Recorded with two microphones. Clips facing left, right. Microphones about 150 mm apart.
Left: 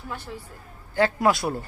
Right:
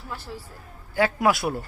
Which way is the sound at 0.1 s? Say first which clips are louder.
Even; centre (ahead or behind).